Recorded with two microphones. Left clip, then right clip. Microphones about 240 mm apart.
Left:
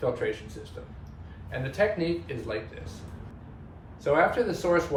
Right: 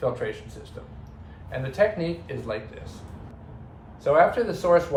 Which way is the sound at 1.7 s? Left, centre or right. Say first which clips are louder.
Right 3 dB; centre.